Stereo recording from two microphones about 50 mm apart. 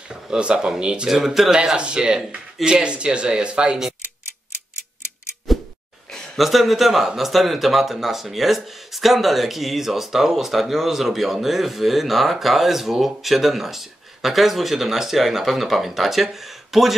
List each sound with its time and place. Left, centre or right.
0.1 s speech: centre
1.5 s speech: centre
5.5 s a sound: centre
6.3 s speech: centre